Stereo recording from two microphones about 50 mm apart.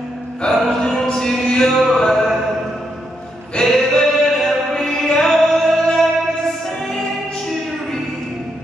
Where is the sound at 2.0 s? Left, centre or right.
Centre.